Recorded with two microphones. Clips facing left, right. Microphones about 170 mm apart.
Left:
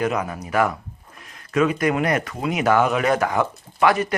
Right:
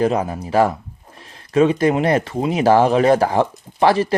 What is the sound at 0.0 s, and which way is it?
Speech, 30° right (ahead or behind).